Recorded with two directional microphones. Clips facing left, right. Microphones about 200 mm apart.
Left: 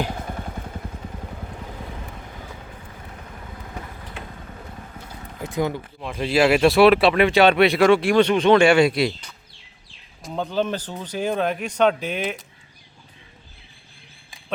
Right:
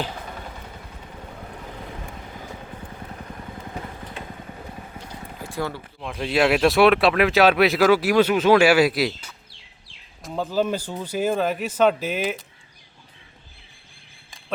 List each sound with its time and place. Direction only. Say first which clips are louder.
5.4 s speech: left 5 dB; 20° left (ahead or behind)
6.0 s speech: left 2 dB; centre (ahead or behind)